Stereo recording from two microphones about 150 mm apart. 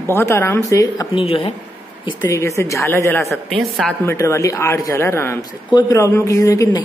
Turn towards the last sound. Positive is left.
turn(degrees=20)  # may be behind; listen again after turning